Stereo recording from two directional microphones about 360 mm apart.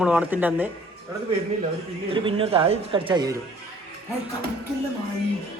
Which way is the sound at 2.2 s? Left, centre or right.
Centre.